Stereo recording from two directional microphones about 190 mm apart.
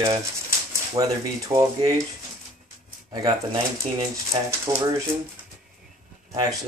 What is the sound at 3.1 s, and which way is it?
Speech, 20° right (ahead or behind).